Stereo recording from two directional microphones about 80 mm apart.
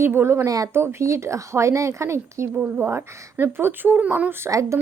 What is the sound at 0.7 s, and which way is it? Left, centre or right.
Speech, right.